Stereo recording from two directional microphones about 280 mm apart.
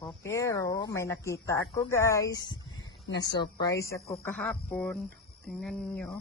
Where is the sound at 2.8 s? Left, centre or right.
Left.